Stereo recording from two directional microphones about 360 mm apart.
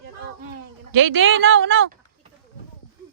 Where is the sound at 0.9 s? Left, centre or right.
Right.